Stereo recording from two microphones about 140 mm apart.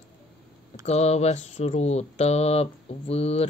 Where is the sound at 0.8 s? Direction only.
50° left (ahead or behind).